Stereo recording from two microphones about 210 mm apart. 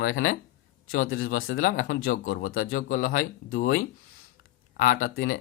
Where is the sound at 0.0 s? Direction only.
70° left (ahead or behind).